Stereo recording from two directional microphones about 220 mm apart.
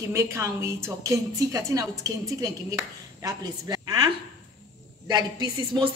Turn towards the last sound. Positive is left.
turn(degrees=-20)  # may be behind; listen again after turning